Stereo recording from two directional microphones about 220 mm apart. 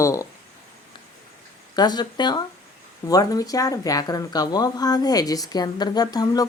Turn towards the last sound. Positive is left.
turn(degrees=15)  # may be behind; listen again after turning